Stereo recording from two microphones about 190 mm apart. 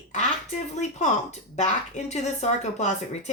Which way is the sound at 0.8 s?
40° left (ahead or behind).